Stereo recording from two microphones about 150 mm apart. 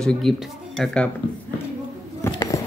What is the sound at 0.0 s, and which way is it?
Speech, centre (ahead or behind).